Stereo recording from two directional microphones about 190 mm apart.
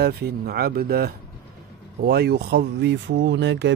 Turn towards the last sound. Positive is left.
turn(degrees=-70)  # may be behind; listen again after turning